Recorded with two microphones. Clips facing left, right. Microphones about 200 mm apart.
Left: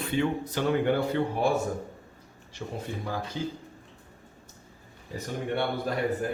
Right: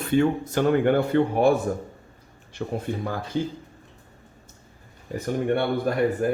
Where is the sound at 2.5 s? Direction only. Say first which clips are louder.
Right 6 dB; 55° right (ahead or behind).